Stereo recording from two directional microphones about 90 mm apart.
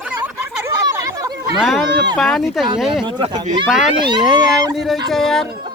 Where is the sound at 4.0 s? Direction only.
60° right (ahead or behind).